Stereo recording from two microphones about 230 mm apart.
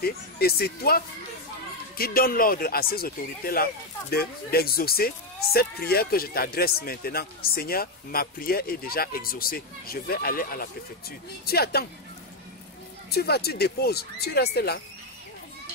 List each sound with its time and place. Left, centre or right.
0.0 s speech: left
13.1 s speech: left